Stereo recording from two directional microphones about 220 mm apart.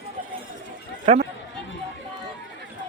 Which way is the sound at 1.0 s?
30° right (ahead or behind).